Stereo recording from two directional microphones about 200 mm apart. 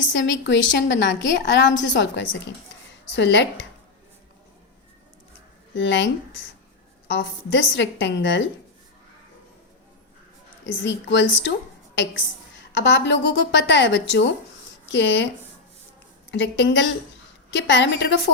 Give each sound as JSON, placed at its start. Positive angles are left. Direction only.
{"t": 0.1, "sound": "a woman's voice", "side_deg": 65}
{"t": 5.7, "sound": "a woman's voice", "side_deg": 65}
{"t": 7.1, "sound": "a woman's voice", "side_deg": 65}
{"t": 10.6, "sound": "a woman's voice", "side_deg": 65}
{"t": 16.3, "sound": "a woman's voice", "side_deg": 60}